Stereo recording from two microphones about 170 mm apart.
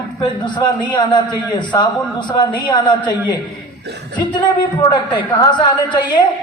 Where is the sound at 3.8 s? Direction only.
80° right.